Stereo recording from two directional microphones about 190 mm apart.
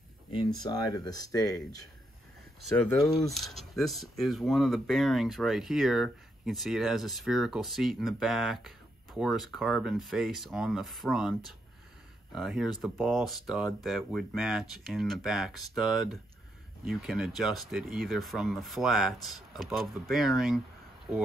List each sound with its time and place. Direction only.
0.3 s speech: 25° left (ahead or behind)
2.7 s speech: centre (ahead or behind)